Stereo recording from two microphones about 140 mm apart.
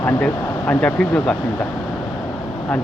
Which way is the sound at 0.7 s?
10° left (ahead or behind).